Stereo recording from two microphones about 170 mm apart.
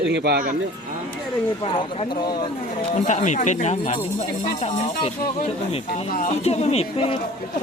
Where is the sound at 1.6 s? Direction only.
30° left (ahead or behind).